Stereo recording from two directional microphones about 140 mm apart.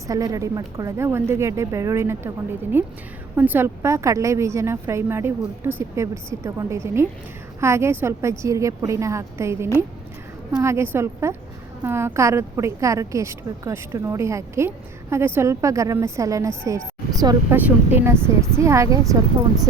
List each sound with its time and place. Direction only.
0.1 s a woman's voice: 25° right (ahead or behind)
17.5 s speech: 15° right (ahead or behind)